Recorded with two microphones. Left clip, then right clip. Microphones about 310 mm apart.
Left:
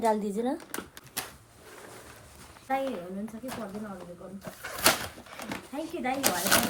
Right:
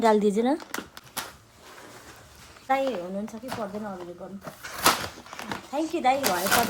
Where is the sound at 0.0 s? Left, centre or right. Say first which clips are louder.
Right 6 dB; right.